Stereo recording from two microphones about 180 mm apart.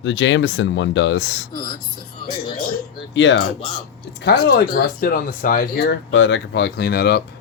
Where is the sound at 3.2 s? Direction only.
90° left.